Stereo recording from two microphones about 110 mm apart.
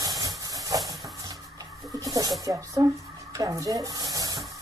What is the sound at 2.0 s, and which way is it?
Speech, 35° right (ahead or behind).